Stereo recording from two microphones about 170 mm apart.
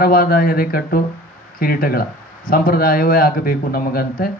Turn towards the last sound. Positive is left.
turn(degrees=60)  # may be behind; listen again after turning